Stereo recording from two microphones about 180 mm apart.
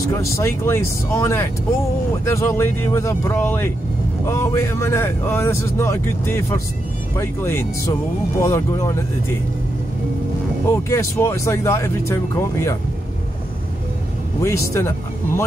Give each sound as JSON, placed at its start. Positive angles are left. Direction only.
{"t": 0.1, "sound": "speech", "side_deg": 15}
{"t": 10.7, "sound": "speech", "side_deg": 15}
{"t": 14.4, "sound": "speech", "side_deg": 15}